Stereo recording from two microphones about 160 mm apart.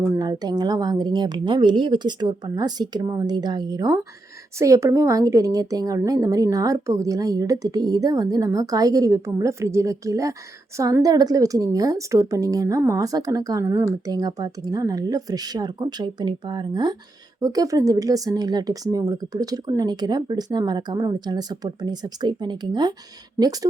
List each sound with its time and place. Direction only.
0.0 s a woman's voice: 20° right (ahead or behind)